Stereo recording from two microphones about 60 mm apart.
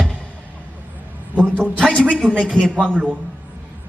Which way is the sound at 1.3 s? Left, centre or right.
Right.